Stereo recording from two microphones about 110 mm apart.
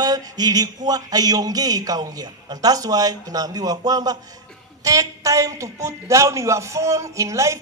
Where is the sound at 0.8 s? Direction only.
35° right (ahead or behind).